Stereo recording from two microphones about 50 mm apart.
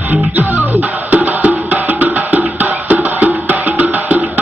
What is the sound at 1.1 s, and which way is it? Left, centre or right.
Music, right.